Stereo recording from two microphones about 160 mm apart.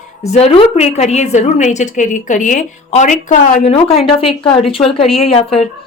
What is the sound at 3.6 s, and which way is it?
A woman's voice, 40° left (ahead or behind).